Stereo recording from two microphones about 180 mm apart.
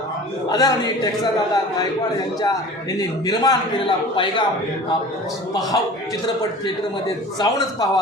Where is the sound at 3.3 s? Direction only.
20° left (ahead or behind).